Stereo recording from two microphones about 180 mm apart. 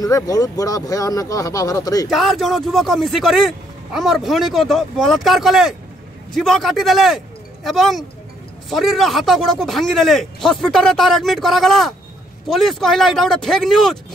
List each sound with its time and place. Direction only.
0.0 s speech: 20° left (ahead or behind)
2.0 s speech: centre (ahead or behind)